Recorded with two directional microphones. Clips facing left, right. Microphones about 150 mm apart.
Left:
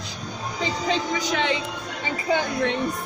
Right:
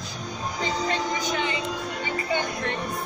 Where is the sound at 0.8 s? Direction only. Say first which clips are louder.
Left 2 dB; 90° left.